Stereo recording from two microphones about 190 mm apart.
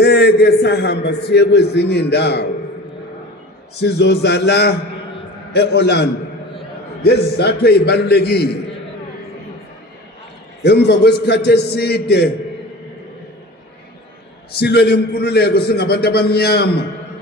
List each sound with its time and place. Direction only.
0.0 s a man's voice: 60° left (ahead or behind)
3.8 s a man's voice: 60° left (ahead or behind)
10.6 s a man's voice: 60° left (ahead or behind)
14.6 s a man's voice: 55° left (ahead or behind)